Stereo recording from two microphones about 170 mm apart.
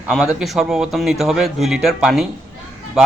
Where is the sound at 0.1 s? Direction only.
5° right (ahead or behind).